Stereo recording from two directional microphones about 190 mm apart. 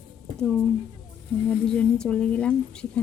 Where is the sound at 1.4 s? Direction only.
5° left (ahead or behind).